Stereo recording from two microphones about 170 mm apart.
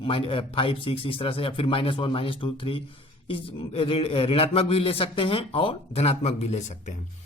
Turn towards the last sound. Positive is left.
turn(degrees=40)  # may be behind; listen again after turning